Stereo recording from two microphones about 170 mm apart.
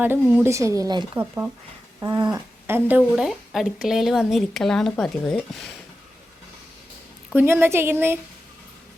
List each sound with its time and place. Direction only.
0.0 s a woman's voice: 10° right (ahead or behind)
2.0 s dog: 25° right (ahead or behind)
2.6 s a woman's voice: 10° right (ahead or behind)
3.2 s speech: centre (ahead or behind)
7.3 s a woman's voice: 15° right (ahead or behind)